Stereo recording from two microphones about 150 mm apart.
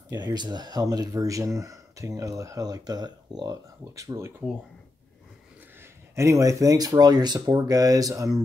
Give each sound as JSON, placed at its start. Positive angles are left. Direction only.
{"t": 0.1, "sound": "speech", "side_deg": -30}
{"t": 5.8, "sound": "speech", "side_deg": -20}